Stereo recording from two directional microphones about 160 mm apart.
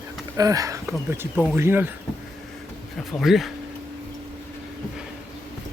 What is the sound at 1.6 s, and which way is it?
Speech, 15° right (ahead or behind).